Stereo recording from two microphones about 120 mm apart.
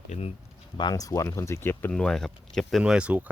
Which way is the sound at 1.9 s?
5° left (ahead or behind).